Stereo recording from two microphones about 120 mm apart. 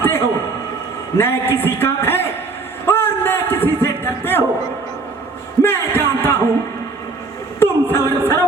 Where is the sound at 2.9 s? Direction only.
20° left (ahead or behind).